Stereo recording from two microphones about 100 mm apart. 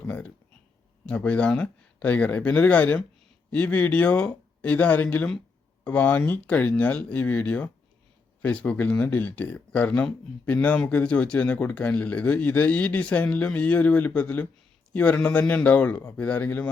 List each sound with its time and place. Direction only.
1.0 s speech: 15° left (ahead or behind)